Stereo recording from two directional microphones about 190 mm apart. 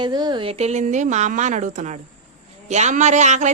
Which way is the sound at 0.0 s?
20° right (ahead or behind).